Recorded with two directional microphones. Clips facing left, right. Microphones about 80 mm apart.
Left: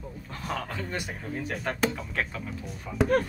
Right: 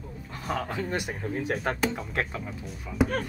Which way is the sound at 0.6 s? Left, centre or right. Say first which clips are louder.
Right 3 dB; right.